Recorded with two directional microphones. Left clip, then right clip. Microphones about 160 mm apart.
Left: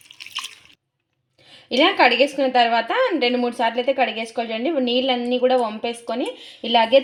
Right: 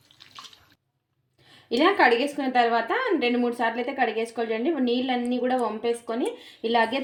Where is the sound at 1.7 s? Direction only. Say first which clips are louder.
Left 4 dB; 30° left (ahead or behind).